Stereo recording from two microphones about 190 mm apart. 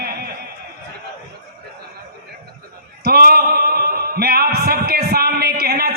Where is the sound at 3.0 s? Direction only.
55° right (ahead or behind).